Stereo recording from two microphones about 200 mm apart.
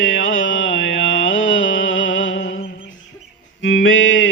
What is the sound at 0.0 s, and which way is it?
Mantra, 75° left (ahead or behind).